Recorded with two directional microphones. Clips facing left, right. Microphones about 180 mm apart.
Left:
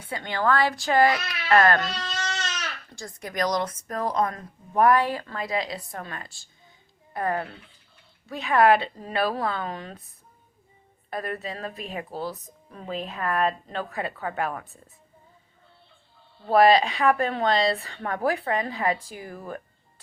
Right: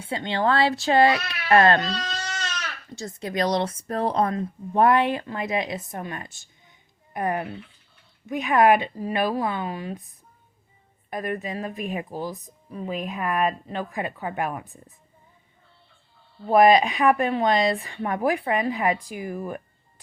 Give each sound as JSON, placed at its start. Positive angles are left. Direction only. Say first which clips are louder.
{"t": 0.0, "sound": "a woman's voice", "louder": "right 2 dB", "side_deg": -25}
{"t": 2.9, "sound": "a woman's voice", "louder": "right 7 dB", "side_deg": -25}
{"t": 11.1, "sound": "speech", "louder": "right 3 dB", "side_deg": -15}
{"t": 16.5, "sound": "speech", "louder": "right 2 dB", "side_deg": -15}